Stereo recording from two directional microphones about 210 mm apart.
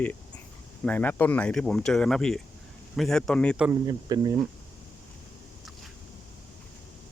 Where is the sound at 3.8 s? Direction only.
20° right (ahead or behind).